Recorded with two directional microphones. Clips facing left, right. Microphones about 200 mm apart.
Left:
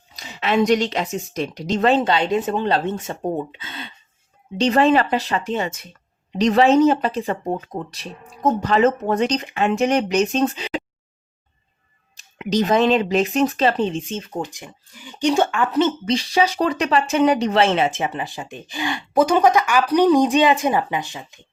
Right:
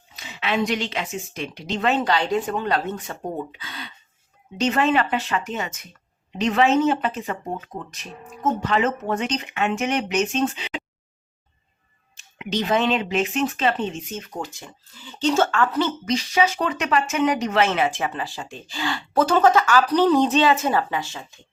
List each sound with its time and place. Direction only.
0.1 s speech: 40° left (ahead or behind)
12.1 s speech: 40° left (ahead or behind); by 21.3 s 15° left (ahead or behind)